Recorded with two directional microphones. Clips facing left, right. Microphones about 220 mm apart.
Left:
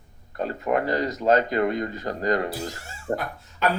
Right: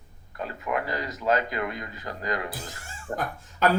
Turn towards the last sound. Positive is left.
turn(degrees=-45)  # may be behind; listen again after turning